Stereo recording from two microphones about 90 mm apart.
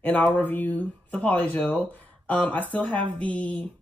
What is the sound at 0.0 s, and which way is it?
Speech, 20° left (ahead or behind).